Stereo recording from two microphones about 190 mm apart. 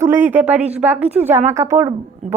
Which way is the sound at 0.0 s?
10° right (ahead or behind).